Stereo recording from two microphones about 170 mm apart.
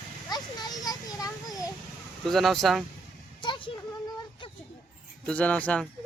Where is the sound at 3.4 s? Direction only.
30° left (ahead or behind).